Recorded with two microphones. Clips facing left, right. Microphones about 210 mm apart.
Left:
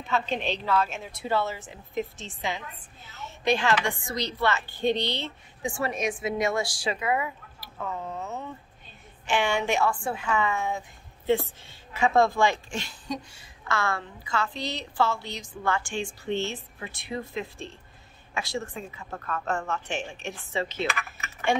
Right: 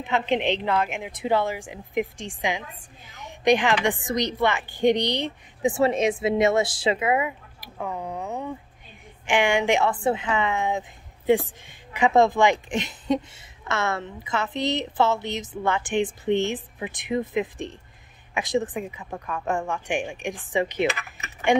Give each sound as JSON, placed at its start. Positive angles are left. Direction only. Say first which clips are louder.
{"t": 0.0, "sound": "a woman's voice", "louder": "right 5 dB", "side_deg": -20}